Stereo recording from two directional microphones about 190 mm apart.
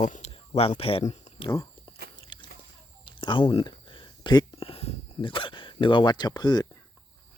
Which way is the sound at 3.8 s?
25° left (ahead or behind).